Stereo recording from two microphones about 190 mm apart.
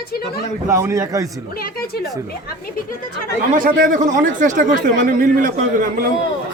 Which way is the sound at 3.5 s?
45° right (ahead or behind).